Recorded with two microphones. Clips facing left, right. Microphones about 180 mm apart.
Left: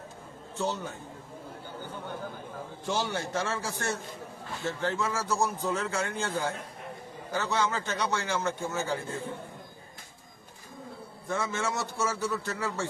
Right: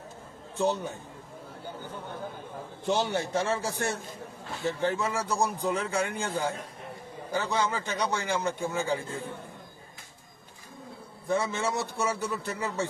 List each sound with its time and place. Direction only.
0.5 s a man's voice: 15° right (ahead or behind)
2.8 s a man's voice: 20° right (ahead or behind)
11.3 s a man's voice: 15° right (ahead or behind)